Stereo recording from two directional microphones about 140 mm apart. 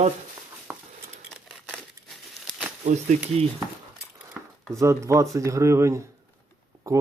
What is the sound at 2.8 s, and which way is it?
Speech, 60° right (ahead or behind).